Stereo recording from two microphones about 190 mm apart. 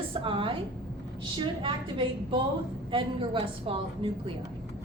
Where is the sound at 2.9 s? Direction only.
25° right (ahead or behind).